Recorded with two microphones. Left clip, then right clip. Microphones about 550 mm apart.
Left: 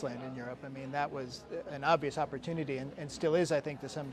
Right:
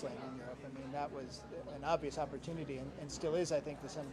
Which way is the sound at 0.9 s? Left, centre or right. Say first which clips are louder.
Left 7 dB; left.